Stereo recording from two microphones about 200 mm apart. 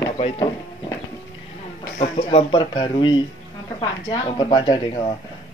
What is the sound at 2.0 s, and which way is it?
Speech, 30° left (ahead or behind).